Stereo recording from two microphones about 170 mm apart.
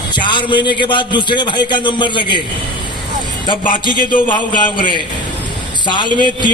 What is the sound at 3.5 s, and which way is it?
A man's voice, 30° left (ahead or behind).